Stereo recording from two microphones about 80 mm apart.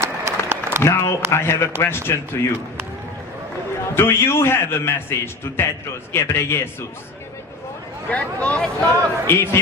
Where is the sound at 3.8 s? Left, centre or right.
Left.